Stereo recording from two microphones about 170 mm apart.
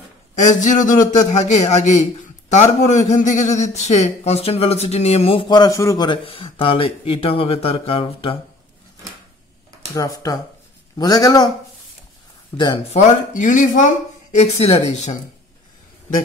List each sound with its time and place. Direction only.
0.4 s a man's voice: 45° left (ahead or behind); by 6.0 s 20° left (ahead or behind)
6.0 s a man's voice: 30° left (ahead or behind)
9.9 s a man's voice: 20° left (ahead or behind)
12.5 s a man's voice: 30° left (ahead or behind)